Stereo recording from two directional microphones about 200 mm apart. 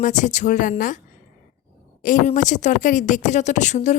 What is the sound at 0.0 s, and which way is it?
Speech, 40° left (ahead or behind).